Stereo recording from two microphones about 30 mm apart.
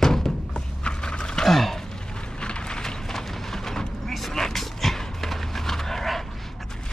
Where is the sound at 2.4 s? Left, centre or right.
Left.